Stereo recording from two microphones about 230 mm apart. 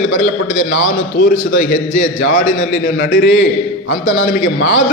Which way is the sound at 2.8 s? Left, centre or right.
Left.